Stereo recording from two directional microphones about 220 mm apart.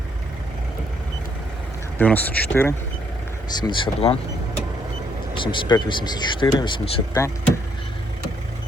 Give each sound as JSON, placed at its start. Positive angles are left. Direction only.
{"t": 2.0, "sound": "speech", "side_deg": 10}
{"t": 3.5, "sound": "speech", "side_deg": 20}
{"t": 5.4, "sound": "speech", "side_deg": 20}